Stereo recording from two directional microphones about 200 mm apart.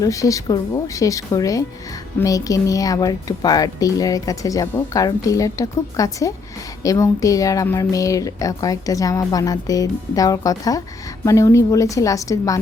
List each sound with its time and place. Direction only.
0.0 s a woman's voice: 15° left (ahead or behind)